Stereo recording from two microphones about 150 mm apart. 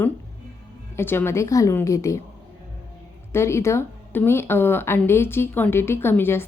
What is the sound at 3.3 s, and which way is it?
Speech, 20° left (ahead or behind).